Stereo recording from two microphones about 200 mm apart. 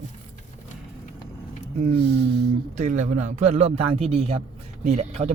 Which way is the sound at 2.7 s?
35° right (ahead or behind).